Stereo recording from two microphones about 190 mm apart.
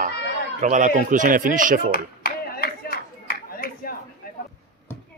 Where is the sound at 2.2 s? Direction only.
50° left (ahead or behind).